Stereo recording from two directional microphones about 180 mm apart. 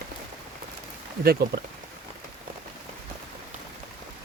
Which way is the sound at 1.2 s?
60° right (ahead or behind).